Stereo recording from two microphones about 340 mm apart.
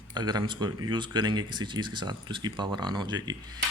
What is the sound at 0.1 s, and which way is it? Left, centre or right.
Speech, centre.